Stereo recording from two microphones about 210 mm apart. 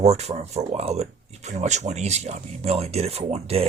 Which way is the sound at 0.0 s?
30° right (ahead or behind).